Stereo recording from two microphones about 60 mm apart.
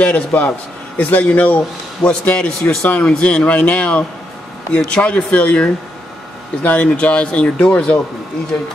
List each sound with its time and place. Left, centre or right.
0.0 s speech: left